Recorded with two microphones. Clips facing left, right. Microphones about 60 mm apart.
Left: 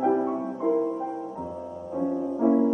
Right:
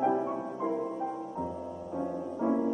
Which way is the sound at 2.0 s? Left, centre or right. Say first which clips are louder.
Left 8 dB; centre.